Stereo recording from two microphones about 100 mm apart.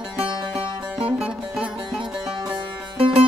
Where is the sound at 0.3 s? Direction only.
50° right (ahead or behind).